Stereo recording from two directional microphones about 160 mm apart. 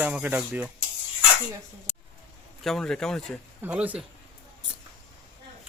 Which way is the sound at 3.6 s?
10° right (ahead or behind).